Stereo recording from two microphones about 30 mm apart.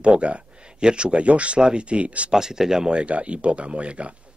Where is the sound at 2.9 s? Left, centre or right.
Right.